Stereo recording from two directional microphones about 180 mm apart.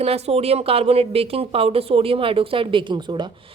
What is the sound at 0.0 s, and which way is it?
A woman's voice, 35° right (ahead or behind).